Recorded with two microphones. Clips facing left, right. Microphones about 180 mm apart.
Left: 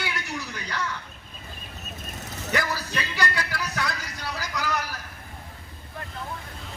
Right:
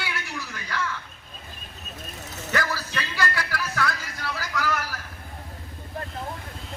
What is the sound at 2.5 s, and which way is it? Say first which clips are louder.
Music: even; 15° left (ahead or behind).